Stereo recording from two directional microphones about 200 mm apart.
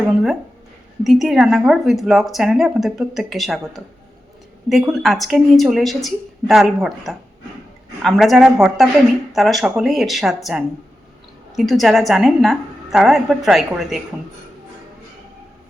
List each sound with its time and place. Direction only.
1.0 s speech: centre (ahead or behind)